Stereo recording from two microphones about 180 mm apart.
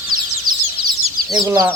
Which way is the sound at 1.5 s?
15° right (ahead or behind).